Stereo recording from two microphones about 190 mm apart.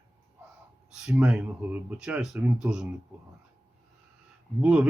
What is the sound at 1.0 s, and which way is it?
Speech, 5° right (ahead or behind).